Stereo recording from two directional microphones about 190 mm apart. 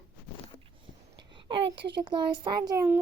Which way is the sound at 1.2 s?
25° right (ahead or behind).